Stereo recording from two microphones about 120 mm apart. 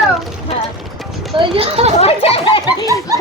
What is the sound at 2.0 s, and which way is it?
Speech, 60° left (ahead or behind).